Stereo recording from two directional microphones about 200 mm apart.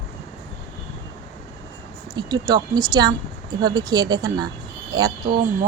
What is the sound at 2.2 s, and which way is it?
Speech, 20° right (ahead or behind).